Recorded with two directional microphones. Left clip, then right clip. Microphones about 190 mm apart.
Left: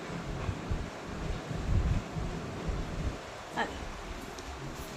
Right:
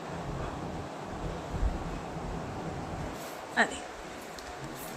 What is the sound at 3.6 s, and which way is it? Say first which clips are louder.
Speech: right 7 dB; 65° right (ahead or behind).